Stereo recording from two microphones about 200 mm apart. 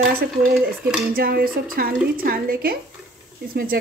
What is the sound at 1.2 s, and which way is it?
A woman's voice, 50° right (ahead or behind).